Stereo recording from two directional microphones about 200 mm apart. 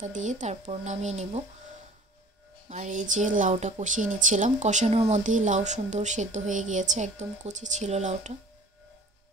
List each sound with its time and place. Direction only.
0.0 s a woman's voice: 35° right (ahead or behind)
2.7 s a woman's voice: 40° right (ahead or behind)